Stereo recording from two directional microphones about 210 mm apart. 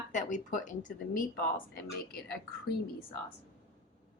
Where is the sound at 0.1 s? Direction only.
35° left (ahead or behind).